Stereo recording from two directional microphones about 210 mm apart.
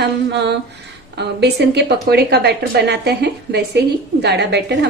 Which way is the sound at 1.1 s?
50° right (ahead or behind).